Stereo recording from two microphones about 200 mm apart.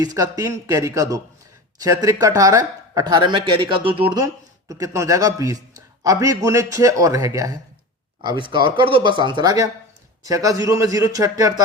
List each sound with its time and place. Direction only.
0.0 s a man's voice: 20° right (ahead or behind)